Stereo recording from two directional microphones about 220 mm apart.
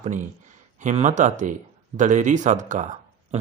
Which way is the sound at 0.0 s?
35° right (ahead or behind).